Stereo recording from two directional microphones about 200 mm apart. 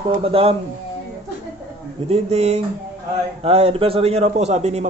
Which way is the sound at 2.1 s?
30° right (ahead or behind).